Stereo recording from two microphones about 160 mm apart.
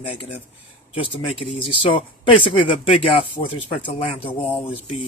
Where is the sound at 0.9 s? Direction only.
35° left (ahead or behind).